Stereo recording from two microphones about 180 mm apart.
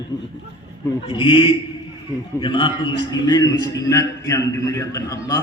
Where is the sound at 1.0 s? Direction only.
30° left (ahead or behind).